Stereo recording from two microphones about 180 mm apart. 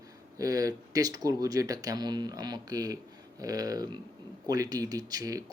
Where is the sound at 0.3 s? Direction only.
20° right (ahead or behind).